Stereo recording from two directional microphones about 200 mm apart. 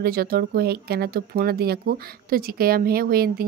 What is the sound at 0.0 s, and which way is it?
Speech, 50° right (ahead or behind).